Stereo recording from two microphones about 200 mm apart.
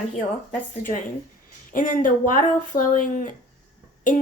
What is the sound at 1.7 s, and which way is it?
A woman's voice, 40° left (ahead or behind).